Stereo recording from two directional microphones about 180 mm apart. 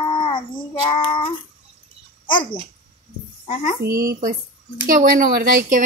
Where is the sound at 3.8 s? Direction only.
15° right (ahead or behind).